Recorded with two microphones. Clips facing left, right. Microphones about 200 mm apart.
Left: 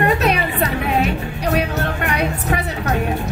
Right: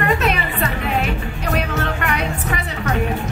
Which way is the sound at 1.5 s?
40° left (ahead or behind).